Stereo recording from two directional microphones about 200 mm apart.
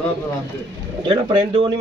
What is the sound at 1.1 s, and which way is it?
Speech, 25° right (ahead or behind).